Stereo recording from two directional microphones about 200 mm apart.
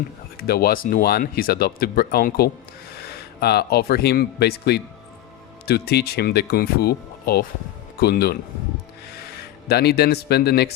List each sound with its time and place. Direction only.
0.3 s speech: 50° left (ahead or behind)
9.6 s speech: 55° left (ahead or behind)